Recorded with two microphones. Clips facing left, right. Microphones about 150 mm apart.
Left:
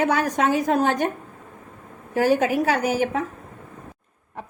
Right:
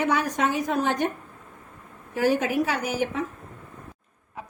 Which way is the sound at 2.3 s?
60° left (ahead or behind).